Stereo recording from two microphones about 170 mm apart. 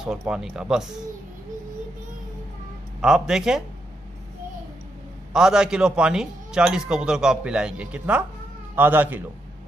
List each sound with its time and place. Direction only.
0.3 s a man's voice: 5° right (ahead or behind)
3.0 s a man's voice: 5° right (ahead or behind)
5.3 s a man's voice: 5° right (ahead or behind)